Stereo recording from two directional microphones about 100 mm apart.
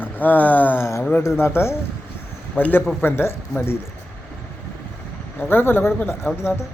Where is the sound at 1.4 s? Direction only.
25° left (ahead or behind).